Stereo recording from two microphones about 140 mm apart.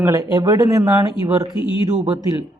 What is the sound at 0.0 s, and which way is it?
Speech, 20° right (ahead or behind).